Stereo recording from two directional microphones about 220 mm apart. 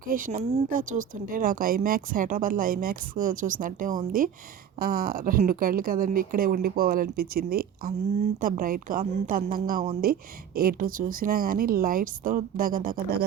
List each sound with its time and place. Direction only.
0.0 s speech: 40° right (ahead or behind)